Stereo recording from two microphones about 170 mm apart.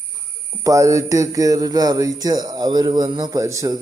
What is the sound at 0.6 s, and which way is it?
Speech, 20° right (ahead or behind).